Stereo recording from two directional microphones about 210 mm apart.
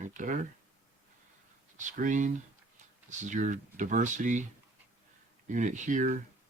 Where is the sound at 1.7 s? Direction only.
35° right (ahead or behind).